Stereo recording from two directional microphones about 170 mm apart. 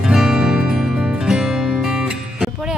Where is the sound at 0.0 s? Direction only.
5° right (ahead or behind).